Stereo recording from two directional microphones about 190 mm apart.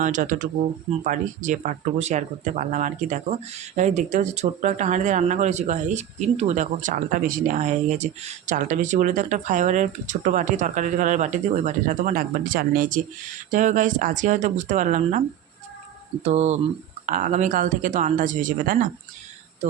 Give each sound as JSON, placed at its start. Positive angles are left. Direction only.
{"t": 0.0, "sound": "speech", "side_deg": -45}
{"t": 16.2, "sound": "speech", "side_deg": -35}